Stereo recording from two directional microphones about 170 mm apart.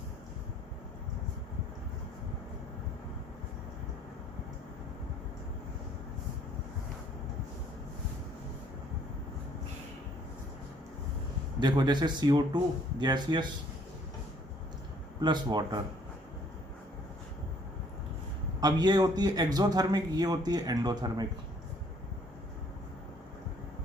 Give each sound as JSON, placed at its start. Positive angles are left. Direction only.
{"t": 11.6, "sound": "speech", "side_deg": -25}
{"t": 15.2, "sound": "speech", "side_deg": -25}
{"t": 18.6, "sound": "speech", "side_deg": -25}